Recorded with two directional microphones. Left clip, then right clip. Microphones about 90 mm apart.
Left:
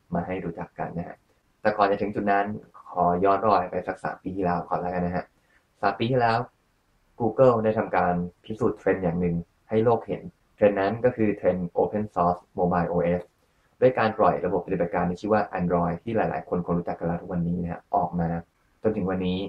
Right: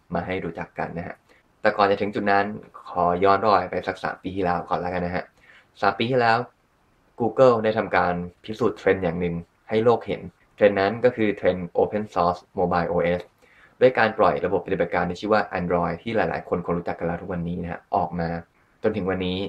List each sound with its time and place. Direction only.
0.1 s speech: 30° right (ahead or behind)